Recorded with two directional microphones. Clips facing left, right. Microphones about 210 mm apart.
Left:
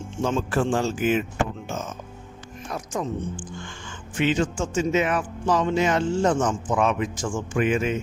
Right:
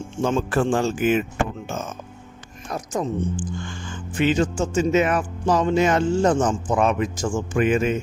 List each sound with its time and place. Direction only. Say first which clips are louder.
0.2 s speech: right 2 dB; 55° right (ahead or behind)
2.6 s speech: right 3 dB; 40° right (ahead or behind)